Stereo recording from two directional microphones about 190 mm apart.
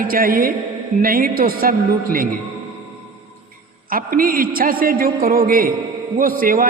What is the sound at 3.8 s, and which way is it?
A man's voice, 50° right (ahead or behind).